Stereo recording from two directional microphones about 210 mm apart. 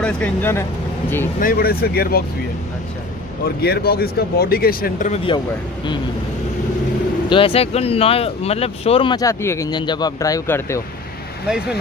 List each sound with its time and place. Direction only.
0.0 s speech: 5° left (ahead or behind)
1.4 s speech: 45° left (ahead or behind)
3.6 s speech: 50° left (ahead or behind)
7.2 s speech: 25° left (ahead or behind)
11.4 s speech: 5° right (ahead or behind)